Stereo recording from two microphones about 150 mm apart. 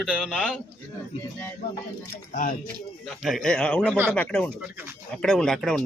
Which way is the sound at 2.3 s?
65° left (ahead or behind).